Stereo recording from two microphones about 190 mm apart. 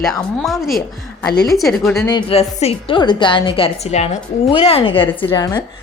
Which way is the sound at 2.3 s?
35° left (ahead or behind).